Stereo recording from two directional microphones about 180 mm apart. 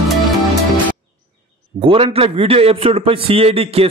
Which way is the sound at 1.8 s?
30° right (ahead or behind).